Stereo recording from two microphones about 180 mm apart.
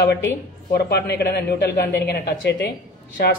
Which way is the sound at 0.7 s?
60° left (ahead or behind).